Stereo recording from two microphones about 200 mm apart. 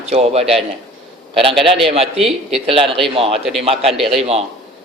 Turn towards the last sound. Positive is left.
turn(degrees=-30)  # may be behind; listen again after turning